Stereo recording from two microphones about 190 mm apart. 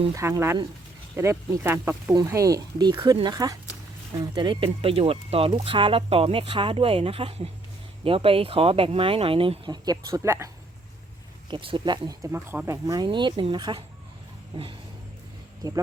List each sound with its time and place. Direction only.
0.1 s speech: 15° right (ahead or behind)
11.5 s speech: 25° right (ahead or behind)